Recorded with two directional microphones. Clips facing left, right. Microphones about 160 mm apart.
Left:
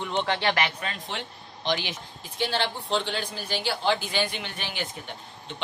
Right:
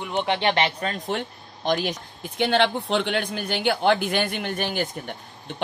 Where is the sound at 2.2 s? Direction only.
65° right (ahead or behind).